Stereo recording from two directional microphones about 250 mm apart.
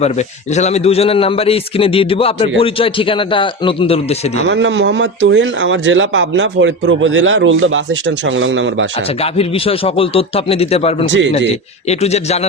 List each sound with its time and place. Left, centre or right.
0.0 s a man's voice: left
4.4 s speech: right
9.2 s a man's voice: left
11.0 s speech: right
11.9 s a man's voice: left